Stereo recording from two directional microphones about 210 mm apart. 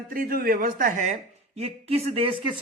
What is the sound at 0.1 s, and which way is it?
Speech, 45° right (ahead or behind).